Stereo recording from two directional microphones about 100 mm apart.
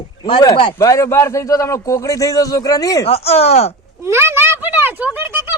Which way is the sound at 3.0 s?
90° left.